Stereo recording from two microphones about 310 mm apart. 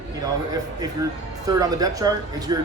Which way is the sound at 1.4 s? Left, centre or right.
Centre.